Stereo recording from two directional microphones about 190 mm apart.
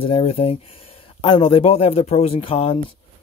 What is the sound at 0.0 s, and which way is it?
Speech, 30° left (ahead or behind).